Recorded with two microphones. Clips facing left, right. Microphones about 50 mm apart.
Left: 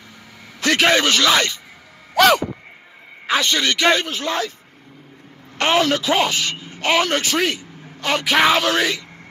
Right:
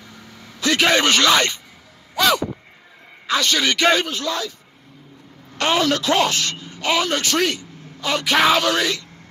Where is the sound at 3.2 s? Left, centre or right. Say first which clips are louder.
Left 1 dB; centre.